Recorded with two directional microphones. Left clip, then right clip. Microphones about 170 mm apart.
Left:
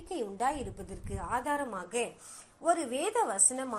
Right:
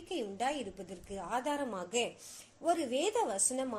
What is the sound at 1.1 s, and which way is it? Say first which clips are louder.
A woman's voice: left 3 dB; 15° right (ahead or behind).